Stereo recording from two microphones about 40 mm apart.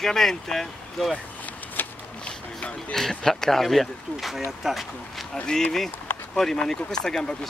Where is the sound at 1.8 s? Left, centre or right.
Left.